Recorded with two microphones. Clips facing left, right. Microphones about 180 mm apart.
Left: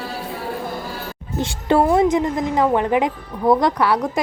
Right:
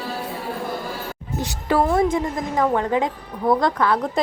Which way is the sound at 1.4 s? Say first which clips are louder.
Left 3 dB; 25° left (ahead or behind).